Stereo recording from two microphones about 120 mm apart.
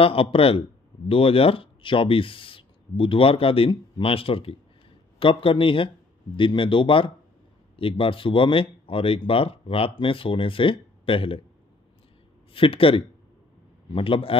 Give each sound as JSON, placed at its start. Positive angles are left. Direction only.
{"t": 0.0, "sound": "speech", "side_deg": 50}
{"t": 12.5, "sound": "speech", "side_deg": 50}